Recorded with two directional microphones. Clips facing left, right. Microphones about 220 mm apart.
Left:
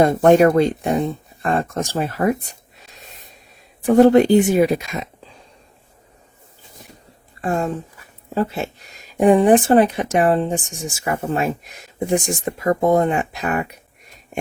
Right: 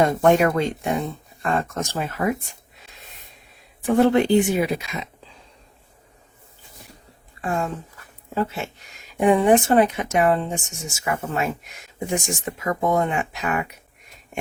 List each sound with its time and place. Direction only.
0.0 s speech: 35° left (ahead or behind)
3.8 s speech: 40° left (ahead or behind)
7.4 s speech: 35° left (ahead or behind)